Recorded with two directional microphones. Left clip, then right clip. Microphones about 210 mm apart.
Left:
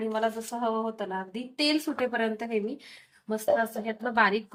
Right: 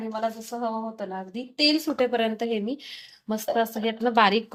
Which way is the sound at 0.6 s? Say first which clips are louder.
Left 1 dB; 25° right (ahead or behind).